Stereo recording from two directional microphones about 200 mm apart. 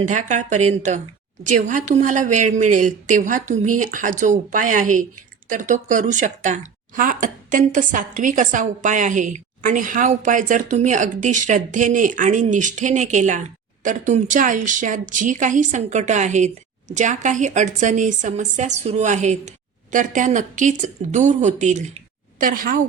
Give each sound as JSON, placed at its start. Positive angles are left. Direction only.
{"t": 0.1, "sound": "a woman's voice", "side_deg": -35}